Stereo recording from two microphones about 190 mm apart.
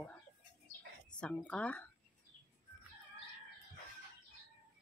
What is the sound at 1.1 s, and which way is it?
Speech, 5° left (ahead or behind).